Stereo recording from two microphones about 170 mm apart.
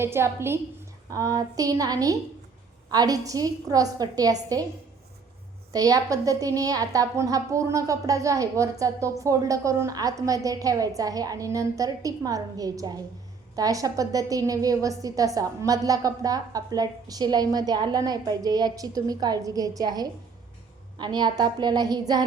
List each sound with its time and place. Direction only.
0.0 s a woman's voice: 15° right (ahead or behind)
5.7 s a woman's voice: 20° right (ahead or behind)